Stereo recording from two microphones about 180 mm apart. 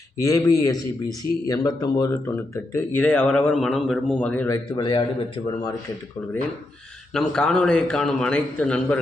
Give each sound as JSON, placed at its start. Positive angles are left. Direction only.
{"t": 0.2, "sound": "a man's voice", "side_deg": 20}
{"t": 4.4, "sound": "speech", "side_deg": 20}
{"t": 7.1, "sound": "a man's voice", "side_deg": 5}